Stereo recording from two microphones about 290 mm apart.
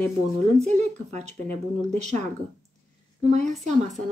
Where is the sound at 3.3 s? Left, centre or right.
Right.